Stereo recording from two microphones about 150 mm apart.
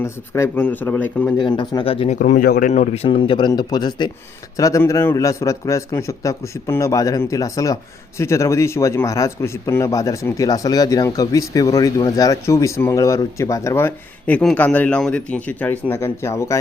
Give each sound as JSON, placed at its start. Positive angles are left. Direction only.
{"t": 0.0, "sound": "speech", "side_deg": 20}
{"t": 1.4, "sound": "speech", "side_deg": 30}
{"t": 2.1, "sound": "a man's voice", "side_deg": 60}